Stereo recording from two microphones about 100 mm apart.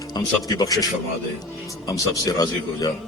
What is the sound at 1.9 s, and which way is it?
Speech, 35° left (ahead or behind).